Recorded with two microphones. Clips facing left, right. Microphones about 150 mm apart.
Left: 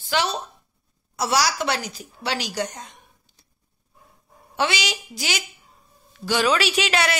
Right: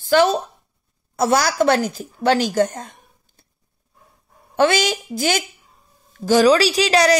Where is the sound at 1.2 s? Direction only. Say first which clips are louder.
Right 6 dB; 50° right (ahead or behind).